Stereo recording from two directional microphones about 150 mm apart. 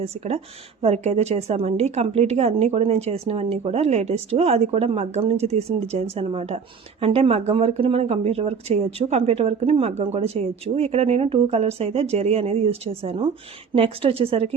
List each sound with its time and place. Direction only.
0.8 s a woman's voice: 45° right (ahead or behind)